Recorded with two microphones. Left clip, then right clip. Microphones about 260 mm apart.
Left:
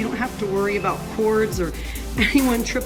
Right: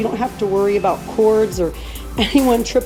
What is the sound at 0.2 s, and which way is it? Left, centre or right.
Speech, centre.